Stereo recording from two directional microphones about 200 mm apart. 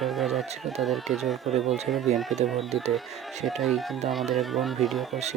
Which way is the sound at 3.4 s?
Centre (ahead or behind).